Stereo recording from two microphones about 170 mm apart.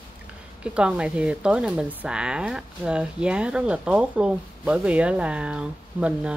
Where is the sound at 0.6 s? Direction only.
5° right (ahead or behind).